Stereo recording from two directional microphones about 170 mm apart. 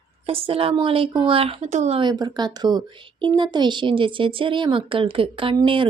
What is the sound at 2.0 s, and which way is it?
A woman's voice, 25° right (ahead or behind).